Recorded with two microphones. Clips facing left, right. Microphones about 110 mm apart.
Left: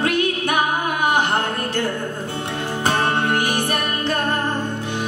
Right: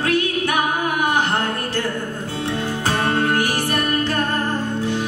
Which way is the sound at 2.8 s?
25° left (ahead or behind).